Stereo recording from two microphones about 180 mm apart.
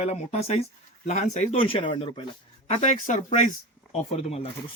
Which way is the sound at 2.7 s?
40° left (ahead or behind).